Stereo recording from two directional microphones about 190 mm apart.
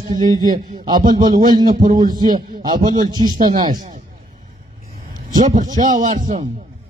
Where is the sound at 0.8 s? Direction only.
20° right (ahead or behind).